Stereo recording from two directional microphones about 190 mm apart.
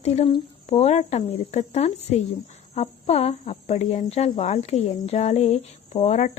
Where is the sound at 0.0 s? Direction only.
35° left (ahead or behind).